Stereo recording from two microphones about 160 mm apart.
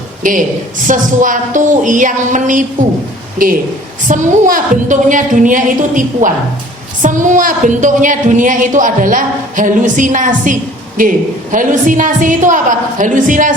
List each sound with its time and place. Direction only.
0.2 s a woman's voice: 55° right (ahead or behind)